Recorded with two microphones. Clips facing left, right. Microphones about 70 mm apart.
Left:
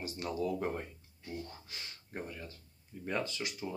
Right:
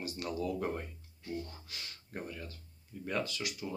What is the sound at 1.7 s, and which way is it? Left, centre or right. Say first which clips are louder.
Speech: even; left.